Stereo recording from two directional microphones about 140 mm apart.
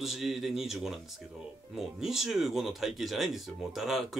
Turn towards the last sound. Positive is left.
turn(degrees=0)  # may be behind; listen again after turning